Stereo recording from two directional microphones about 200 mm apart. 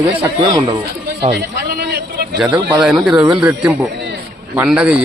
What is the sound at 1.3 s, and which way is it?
Sheep, 50° right (ahead or behind).